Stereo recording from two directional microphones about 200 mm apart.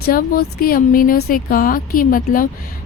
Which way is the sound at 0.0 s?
45° left (ahead or behind).